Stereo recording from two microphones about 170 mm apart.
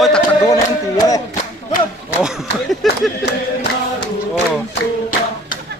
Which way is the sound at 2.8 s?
Centre (ahead or behind).